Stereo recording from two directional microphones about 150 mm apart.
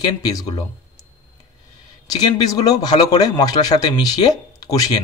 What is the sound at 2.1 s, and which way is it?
A man's voice, 25° left (ahead or behind).